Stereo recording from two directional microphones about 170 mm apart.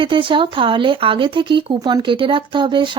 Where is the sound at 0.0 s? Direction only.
30° right (ahead or behind).